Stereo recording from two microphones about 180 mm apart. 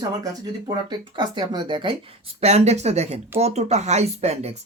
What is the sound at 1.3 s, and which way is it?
Speech, 25° right (ahead or behind).